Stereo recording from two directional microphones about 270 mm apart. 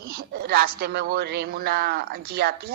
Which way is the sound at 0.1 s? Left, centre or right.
Right.